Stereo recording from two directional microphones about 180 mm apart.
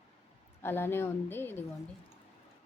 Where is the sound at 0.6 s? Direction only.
10° left (ahead or behind).